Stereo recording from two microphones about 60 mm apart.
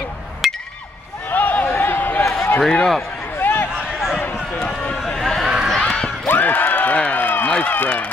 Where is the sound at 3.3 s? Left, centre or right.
Left.